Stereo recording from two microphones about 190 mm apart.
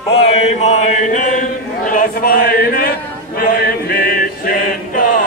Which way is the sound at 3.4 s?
55° left (ahead or behind).